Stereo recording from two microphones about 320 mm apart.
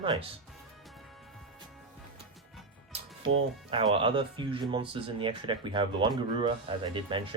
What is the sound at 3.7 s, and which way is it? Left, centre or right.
Speech, centre.